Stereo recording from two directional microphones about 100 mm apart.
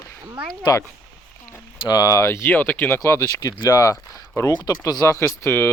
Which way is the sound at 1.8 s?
40° left (ahead or behind).